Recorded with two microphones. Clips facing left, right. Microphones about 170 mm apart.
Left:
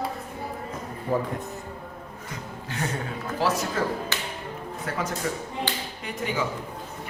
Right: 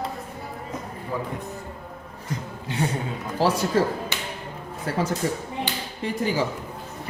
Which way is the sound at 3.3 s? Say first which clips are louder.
Right 5 dB; 30° right (ahead or behind).